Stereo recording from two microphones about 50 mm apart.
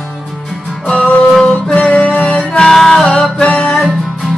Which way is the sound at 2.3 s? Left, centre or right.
Left.